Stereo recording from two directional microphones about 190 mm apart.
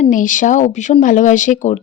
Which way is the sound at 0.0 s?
45° left (ahead or behind).